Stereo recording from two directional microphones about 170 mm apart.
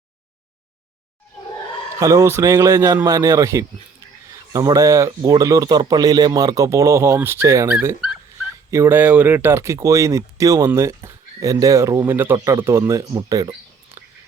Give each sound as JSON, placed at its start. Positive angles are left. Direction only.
{"t": 2.0, "sound": "speech", "side_deg": -20}